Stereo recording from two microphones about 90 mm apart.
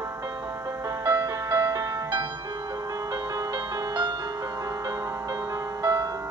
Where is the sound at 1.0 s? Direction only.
35° right (ahead or behind).